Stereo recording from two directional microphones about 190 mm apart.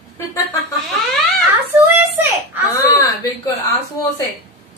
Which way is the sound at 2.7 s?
15° left (ahead or behind).